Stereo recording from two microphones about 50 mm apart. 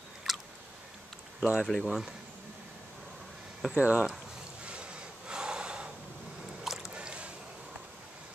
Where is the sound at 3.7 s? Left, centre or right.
Right.